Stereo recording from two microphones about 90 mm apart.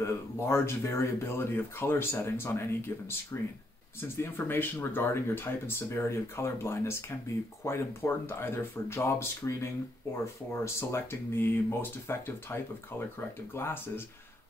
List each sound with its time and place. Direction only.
0.0 s speech: 30° left (ahead or behind)
4.2 s speech: 25° left (ahead or behind)